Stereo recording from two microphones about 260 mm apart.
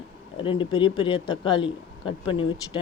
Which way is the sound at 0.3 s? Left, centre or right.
Centre.